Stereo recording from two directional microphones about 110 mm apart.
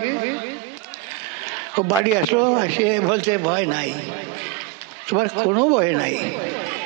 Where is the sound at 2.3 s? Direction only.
25° right (ahead or behind).